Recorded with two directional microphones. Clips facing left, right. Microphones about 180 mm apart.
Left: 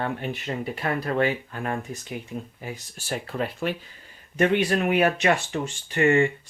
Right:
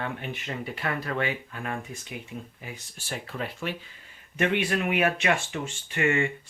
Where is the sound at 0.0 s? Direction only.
40° left (ahead or behind).